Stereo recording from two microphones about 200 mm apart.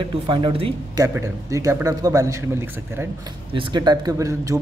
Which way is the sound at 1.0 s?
15° right (ahead or behind).